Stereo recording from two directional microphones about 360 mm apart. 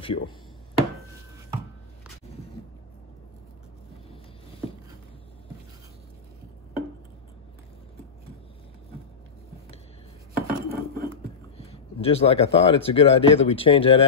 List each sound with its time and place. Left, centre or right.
0.0 s chopping: centre
10.3 s cutlery: right
11.5 s speech: centre